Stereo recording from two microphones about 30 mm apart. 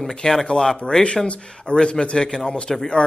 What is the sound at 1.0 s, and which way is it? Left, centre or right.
A man's voice, left.